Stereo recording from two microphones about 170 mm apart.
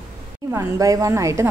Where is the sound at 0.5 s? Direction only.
20° right (ahead or behind).